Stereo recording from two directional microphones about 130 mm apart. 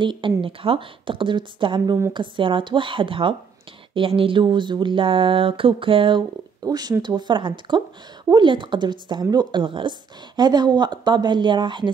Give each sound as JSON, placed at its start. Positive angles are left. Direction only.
{"t": 0.0, "sound": "speech", "side_deg": -40}